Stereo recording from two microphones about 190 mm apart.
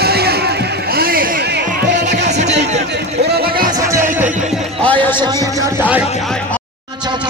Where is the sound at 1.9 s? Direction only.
65° right (ahead or behind).